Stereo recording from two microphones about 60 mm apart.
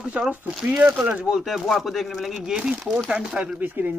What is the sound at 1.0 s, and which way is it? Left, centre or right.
Speech, right.